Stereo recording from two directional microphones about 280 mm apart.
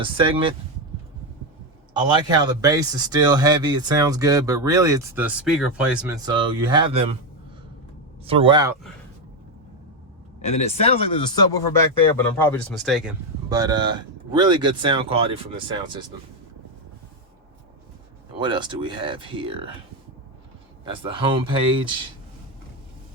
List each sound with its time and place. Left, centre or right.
0.0 s speech: centre
1.9 s speech: centre
6.2 s speech: centre
8.2 s speech: centre
10.4 s speech: left; by 13.1 s centre
13.5 s speech: centre
18.3 s speech: centre
20.8 s speech: centre